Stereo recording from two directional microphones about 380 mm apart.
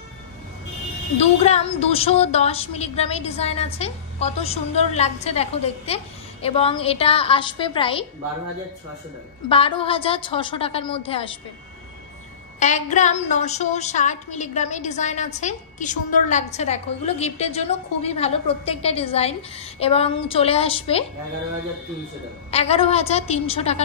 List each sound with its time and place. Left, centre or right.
1.4 s a woman's voice: centre
9.5 s a woman's voice: centre
12.5 s a woman's voice: centre
22.5 s a woman's voice: centre